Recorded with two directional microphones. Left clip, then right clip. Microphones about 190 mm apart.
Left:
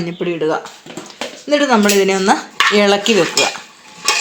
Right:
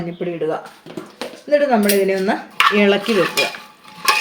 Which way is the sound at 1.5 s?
45° left (ahead or behind).